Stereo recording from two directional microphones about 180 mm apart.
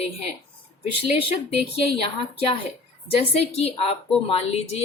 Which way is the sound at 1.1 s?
35° left (ahead or behind).